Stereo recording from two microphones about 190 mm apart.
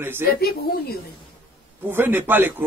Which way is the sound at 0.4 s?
55° left (ahead or behind).